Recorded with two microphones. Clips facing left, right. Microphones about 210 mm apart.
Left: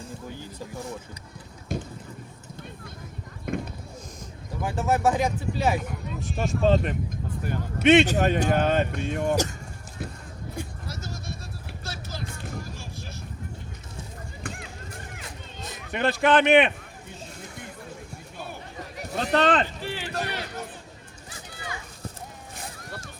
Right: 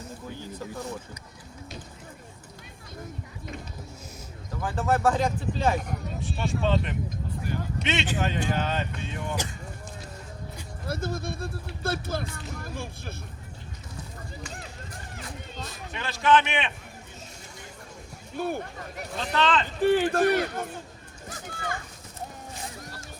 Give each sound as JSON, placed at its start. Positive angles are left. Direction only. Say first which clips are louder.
{"t": 1.7, "sound": "a sound", "louder": "left 13 dB", "side_deg": 50}
{"t": 3.5, "sound": "a sound", "louder": "left 10 dB", "side_deg": 55}
{"t": 4.6, "sound": "speech", "louder": "left 1 dB", "side_deg": 10}
{"t": 6.3, "sound": "speech", "louder": "left 5 dB", "side_deg": 40}
{"t": 10.8, "sound": "speech", "louder": "right 6 dB", "side_deg": -55}
{"t": 15.9, "sound": "a man's voice", "louder": "left 2 dB", "side_deg": 60}
{"t": 18.3, "sound": "speech", "louder": "right 10 dB", "side_deg": -50}
{"t": 19.2, "sound": "speech", "louder": "left 4 dB", "side_deg": 50}
{"t": 19.8, "sound": "speech", "louder": "right 11 dB", "side_deg": -50}
{"t": 21.2, "sound": "children playing", "louder": "right 4 dB", "side_deg": -50}